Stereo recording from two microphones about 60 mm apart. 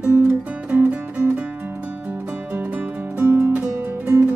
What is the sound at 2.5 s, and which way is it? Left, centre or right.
Music, right.